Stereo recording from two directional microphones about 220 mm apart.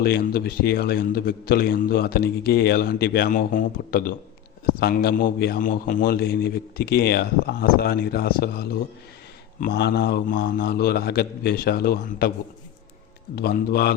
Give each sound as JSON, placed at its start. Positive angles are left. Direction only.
{"t": 0.0, "sound": "a man's voice", "side_deg": 45}
{"t": 13.3, "sound": "a man's voice", "side_deg": 45}